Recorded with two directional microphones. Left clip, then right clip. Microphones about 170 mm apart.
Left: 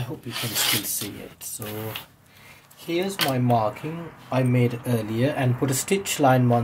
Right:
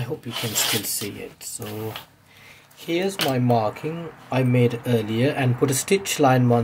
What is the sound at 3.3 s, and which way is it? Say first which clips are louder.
Speech: right 1 dB; 40° right (ahead or behind).